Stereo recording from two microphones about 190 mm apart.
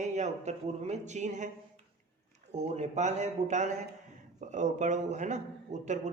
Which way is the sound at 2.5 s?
35° right (ahead or behind).